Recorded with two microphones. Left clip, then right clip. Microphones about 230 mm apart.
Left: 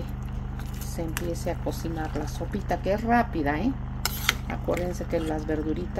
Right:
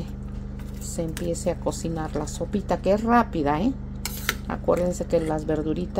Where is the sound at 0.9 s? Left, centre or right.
Right.